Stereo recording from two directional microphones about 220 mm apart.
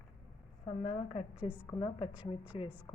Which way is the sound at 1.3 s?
5° right (ahead or behind).